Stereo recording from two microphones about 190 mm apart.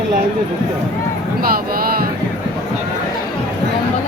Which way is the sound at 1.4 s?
50° right (ahead or behind).